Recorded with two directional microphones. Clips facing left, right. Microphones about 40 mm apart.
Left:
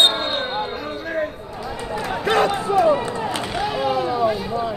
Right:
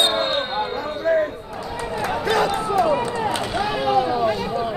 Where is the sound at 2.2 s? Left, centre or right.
Left.